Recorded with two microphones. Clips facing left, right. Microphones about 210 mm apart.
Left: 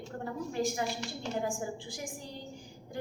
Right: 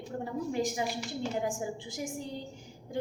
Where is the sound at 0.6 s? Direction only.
10° right (ahead or behind).